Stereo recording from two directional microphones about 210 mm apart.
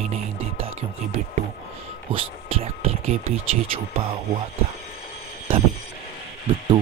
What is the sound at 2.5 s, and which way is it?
Speech, 30° right (ahead or behind).